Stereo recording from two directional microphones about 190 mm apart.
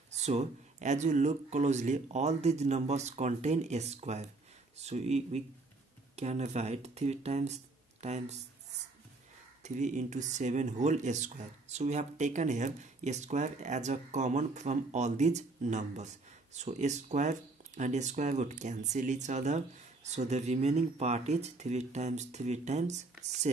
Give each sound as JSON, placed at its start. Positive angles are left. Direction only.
{"t": 0.2, "sound": "speech", "side_deg": -35}
{"t": 9.6, "sound": "speech", "side_deg": -40}